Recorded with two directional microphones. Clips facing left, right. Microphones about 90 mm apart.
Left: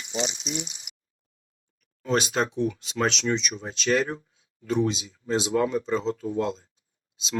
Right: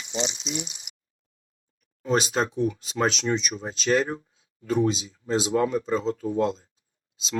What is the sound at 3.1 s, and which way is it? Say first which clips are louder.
Speech: even; 40° right (ahead or behind).